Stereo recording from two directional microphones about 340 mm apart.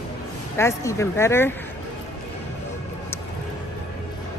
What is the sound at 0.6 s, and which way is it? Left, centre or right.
Speech, centre.